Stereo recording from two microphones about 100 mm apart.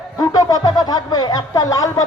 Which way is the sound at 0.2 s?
40° left (ahead or behind).